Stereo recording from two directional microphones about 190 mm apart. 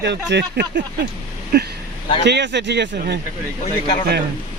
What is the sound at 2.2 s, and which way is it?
Speech, 65° right (ahead or behind).